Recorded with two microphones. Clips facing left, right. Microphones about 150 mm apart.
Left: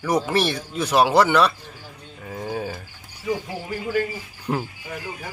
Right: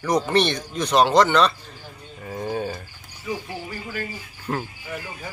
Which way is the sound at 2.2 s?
Centre (ahead or behind).